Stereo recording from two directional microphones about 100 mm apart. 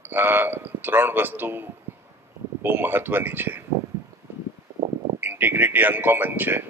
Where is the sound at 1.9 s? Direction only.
20° right (ahead or behind).